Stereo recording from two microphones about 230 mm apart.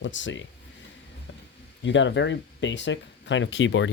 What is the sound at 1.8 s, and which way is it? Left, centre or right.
Speech, left.